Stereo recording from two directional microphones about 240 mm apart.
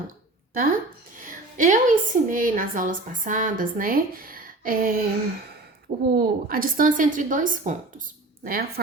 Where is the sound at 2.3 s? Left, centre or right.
Right.